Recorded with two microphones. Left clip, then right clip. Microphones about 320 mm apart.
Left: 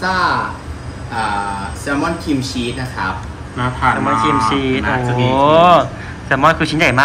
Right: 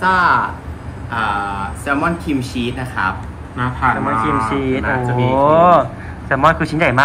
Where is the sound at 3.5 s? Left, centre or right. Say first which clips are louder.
Left 1 dB; centre.